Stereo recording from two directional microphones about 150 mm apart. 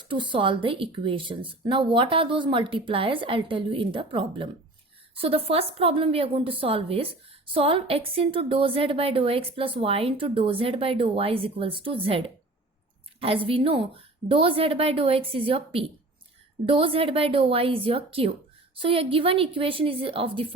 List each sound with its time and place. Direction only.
0.0 s a woman's voice: 30° right (ahead or behind)